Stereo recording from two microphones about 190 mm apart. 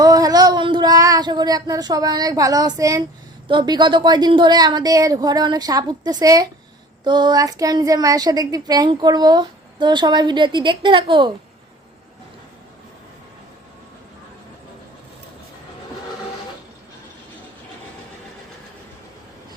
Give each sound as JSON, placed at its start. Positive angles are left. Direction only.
{"t": 0.0, "sound": "child singing", "side_deg": -20}
{"t": 3.4, "sound": "a woman's voice", "side_deg": -25}